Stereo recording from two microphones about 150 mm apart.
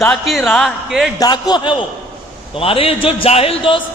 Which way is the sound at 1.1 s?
25° left (ahead or behind).